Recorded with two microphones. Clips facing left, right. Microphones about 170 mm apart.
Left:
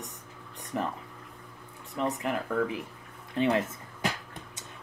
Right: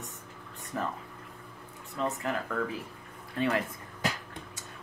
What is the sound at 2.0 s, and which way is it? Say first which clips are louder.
Speech: left 2 dB; 15° left (ahead or behind).